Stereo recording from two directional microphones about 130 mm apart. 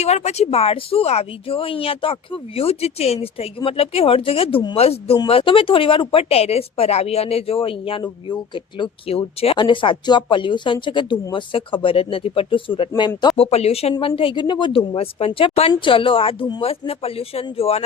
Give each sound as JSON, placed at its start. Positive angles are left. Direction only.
{"t": 0.0, "sound": "speech", "side_deg": 60}
{"t": 14.2, "sound": "a woman's voice", "side_deg": 40}